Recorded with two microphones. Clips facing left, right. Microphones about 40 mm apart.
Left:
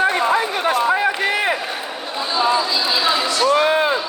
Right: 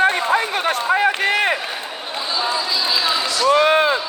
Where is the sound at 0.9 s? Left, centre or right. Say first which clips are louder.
Right 1 dB; right.